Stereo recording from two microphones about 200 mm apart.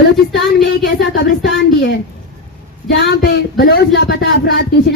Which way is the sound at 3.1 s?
55° left (ahead or behind).